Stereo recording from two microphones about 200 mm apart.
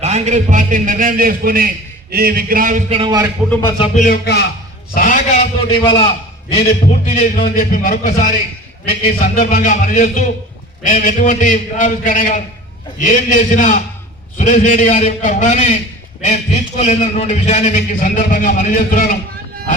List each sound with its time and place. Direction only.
0.0 s a man's voice: 35° right (ahead or behind)
3.0 s a man's voice: 20° right (ahead or behind)
3.8 s music: 40° left (ahead or behind)
4.9 s a sound: 40° left (ahead or behind)
5.6 s a man's voice: 25° left (ahead or behind)
6.6 s a man's voice: 40° left (ahead or behind)